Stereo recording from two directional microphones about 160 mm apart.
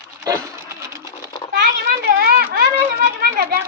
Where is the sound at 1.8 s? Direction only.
75° right (ahead or behind).